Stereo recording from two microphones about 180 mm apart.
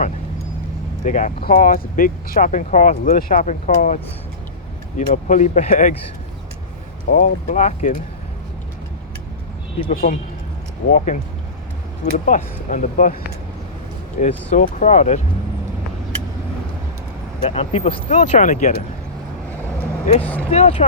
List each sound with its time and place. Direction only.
1.0 s speech: 45° left (ahead or behind)
7.1 s speech: 40° left (ahead or behind)
9.9 s speech: 50° left (ahead or behind)
12.2 s speech: 45° left (ahead or behind)
14.2 s speech: 40° left (ahead or behind)
17.4 s speech: 35° left (ahead or behind)
20.2 s speech: 10° left (ahead or behind)
20.5 s speech: 35° left (ahead or behind)